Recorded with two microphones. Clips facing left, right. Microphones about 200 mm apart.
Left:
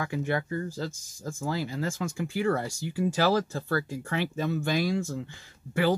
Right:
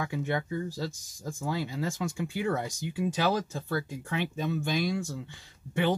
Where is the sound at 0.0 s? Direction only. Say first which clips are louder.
Left 2 dB; 20° right (ahead or behind).